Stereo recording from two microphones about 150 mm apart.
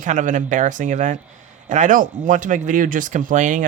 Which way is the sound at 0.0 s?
55° right (ahead or behind).